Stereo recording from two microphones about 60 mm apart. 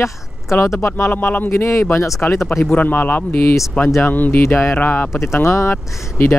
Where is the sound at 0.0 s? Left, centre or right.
Left.